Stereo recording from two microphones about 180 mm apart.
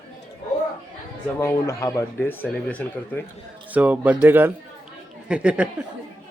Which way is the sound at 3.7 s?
10° right (ahead or behind).